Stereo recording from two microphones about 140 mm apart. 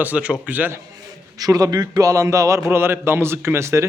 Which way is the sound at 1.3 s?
25° right (ahead or behind).